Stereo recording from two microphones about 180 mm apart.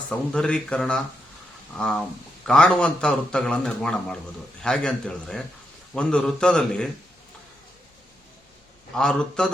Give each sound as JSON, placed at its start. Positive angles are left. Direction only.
{"t": 0.1, "sound": "a man's voice", "side_deg": 5}
{"t": 9.0, "sound": "a man's voice", "side_deg": 5}